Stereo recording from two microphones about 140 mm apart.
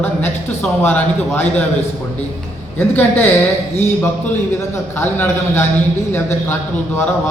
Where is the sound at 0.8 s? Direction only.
15° left (ahead or behind).